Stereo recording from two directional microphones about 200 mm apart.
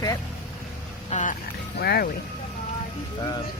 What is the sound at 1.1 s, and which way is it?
Speech, 40° left (ahead or behind).